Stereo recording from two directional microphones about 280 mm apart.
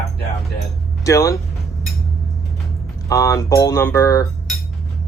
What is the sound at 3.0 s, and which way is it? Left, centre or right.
Speech, centre.